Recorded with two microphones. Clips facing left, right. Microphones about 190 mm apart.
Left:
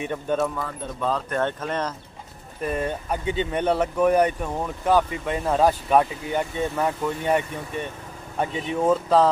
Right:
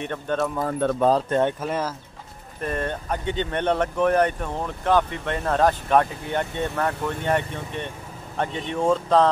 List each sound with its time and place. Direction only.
0.0 s speech: 10° left (ahead or behind)
0.7 s speech: 65° right (ahead or behind)
1.3 s speech: 10° right (ahead or behind)
2.6 s speech: 5° left (ahead or behind)